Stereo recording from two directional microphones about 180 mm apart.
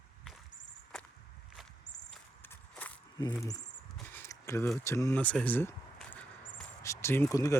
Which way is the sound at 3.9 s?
10° left (ahead or behind).